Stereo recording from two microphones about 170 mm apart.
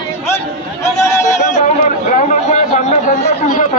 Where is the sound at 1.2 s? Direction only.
45° left (ahead or behind).